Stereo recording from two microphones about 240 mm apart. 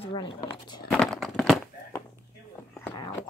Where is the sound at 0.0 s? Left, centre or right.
Left.